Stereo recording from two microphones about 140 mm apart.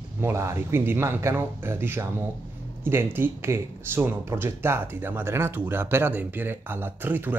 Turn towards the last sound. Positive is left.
turn(degrees=-15)  # may be behind; listen again after turning